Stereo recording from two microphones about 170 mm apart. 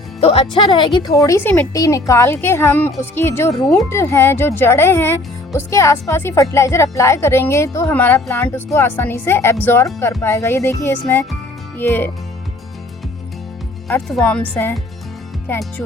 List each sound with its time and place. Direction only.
0.2 s speech: 35° left (ahead or behind); by 12.1 s 10° left (ahead or behind)
13.8 s speech: centre (ahead or behind)